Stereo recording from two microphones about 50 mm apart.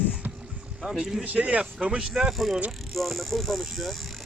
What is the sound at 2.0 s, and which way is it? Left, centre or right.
Speech, centre.